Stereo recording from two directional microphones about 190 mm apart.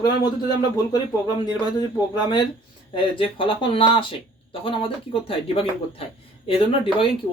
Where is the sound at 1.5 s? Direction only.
20° left (ahead or behind).